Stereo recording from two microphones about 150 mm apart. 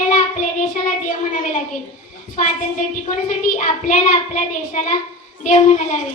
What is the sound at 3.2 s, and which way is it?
Child singing, 60° left (ahead or behind).